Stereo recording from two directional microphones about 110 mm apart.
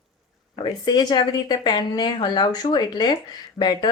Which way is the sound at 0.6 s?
40° left (ahead or behind).